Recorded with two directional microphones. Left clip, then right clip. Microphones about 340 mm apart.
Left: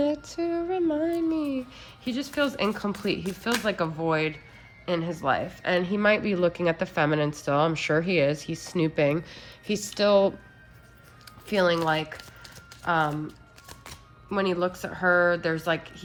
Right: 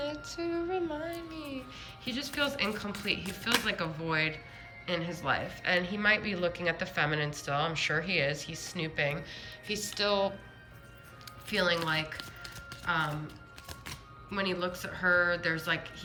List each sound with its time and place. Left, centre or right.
0.1 s female singing: centre
4.9 s a woman's voice: centre
11.4 s a woman's voice: centre
14.3 s a woman's voice: centre